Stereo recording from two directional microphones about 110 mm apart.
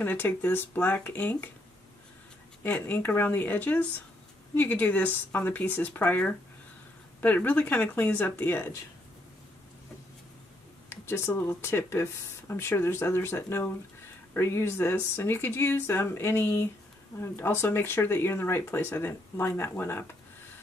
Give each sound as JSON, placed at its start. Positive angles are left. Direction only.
{"t": 0.0, "sound": "speech", "side_deg": 15}
{"t": 2.6, "sound": "speech", "side_deg": 15}
{"t": 10.9, "sound": "speech", "side_deg": 20}